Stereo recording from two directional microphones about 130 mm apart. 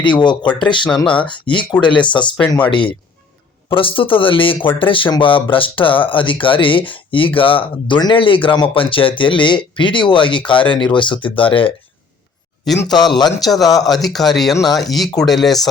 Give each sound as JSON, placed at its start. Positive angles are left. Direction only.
{"t": 0.0, "sound": "speech", "side_deg": 35}
{"t": 12.7, "sound": "speech", "side_deg": 5}
{"t": 13.1, "sound": "speech", "side_deg": 30}
{"t": 13.8, "sound": "speech", "side_deg": 0}